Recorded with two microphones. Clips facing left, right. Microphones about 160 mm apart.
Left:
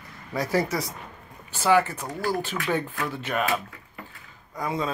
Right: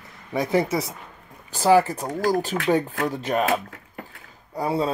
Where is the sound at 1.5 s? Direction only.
35° right (ahead or behind).